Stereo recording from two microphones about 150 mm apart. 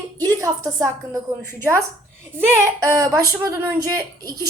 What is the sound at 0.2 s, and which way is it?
Speech, 25° right (ahead or behind).